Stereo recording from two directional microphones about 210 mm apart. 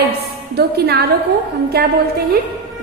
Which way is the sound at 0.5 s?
50° right (ahead or behind).